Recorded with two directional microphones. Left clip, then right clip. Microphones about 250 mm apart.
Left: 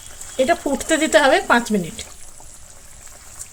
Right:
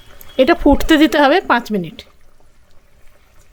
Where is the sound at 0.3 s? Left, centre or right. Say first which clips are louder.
Right 6 dB; right.